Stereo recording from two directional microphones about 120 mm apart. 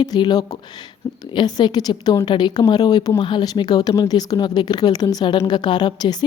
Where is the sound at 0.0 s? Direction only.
35° left (ahead or behind).